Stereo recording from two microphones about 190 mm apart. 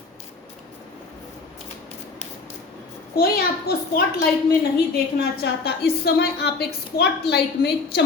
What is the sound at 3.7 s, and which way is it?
Speech, 55° left (ahead or behind).